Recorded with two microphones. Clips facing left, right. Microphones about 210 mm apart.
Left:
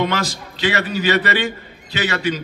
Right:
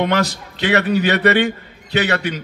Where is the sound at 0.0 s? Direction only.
60° right (ahead or behind).